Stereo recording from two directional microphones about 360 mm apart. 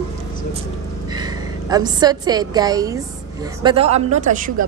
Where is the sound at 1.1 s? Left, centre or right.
Centre.